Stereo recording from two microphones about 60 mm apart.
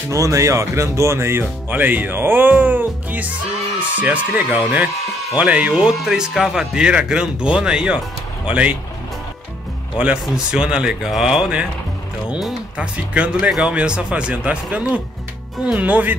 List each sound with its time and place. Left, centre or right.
0.1 s speech: right
1.7 s speech: right
5.9 s speech: centre
9.9 s speech: centre
11.1 s speech: centre
12.7 s speech: right